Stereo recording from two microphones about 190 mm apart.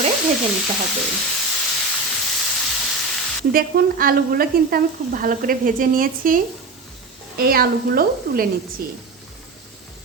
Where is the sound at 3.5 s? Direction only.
50° right (ahead or behind).